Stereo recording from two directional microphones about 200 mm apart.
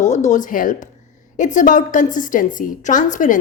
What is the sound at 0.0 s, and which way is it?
A woman's voice, 35° left (ahead or behind).